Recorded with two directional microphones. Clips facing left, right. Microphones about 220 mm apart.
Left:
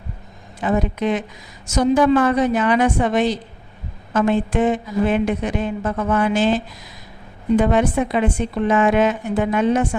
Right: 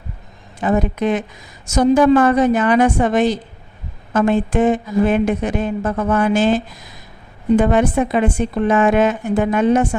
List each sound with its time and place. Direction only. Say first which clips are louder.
0.6 s speech: right 2 dB; 50° right (ahead or behind)